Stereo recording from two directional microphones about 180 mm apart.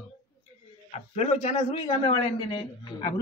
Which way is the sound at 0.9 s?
35° left (ahead or behind).